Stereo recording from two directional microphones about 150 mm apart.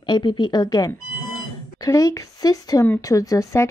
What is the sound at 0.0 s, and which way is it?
Speech, 30° left (ahead or behind).